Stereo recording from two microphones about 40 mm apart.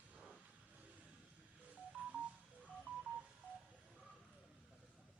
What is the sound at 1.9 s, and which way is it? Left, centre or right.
Telephone dialing, right.